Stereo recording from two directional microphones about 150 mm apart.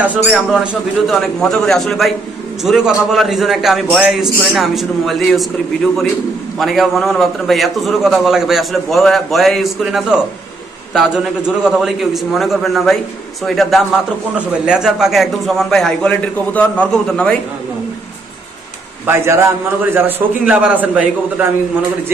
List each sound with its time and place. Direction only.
0.0 s a man's voice: 10° right (ahead or behind)
0.5 s a man's voice: centre (ahead or behind)
6.6 s a man's voice: centre (ahead or behind)
19.0 s a man's voice: 15° right (ahead or behind)